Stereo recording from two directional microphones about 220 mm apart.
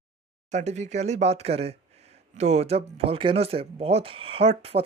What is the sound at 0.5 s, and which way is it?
Speech, 30° right (ahead or behind).